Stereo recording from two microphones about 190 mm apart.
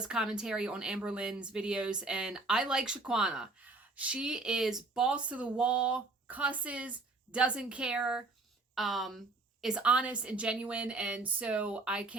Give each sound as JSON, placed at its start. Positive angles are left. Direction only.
{"t": 0.0, "sound": "speech", "side_deg": -5}